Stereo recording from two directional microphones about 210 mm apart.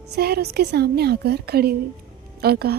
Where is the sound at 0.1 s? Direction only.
50° right (ahead or behind).